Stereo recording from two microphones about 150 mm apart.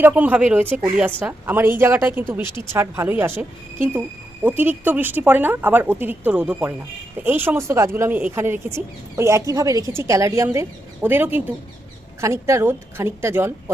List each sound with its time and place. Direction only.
0.0 s speech: 10° right (ahead or behind)